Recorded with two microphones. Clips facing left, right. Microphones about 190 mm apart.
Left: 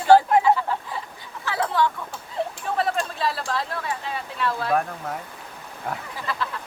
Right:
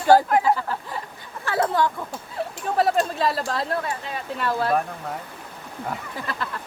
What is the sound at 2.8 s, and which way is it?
Speech, 40° right (ahead or behind).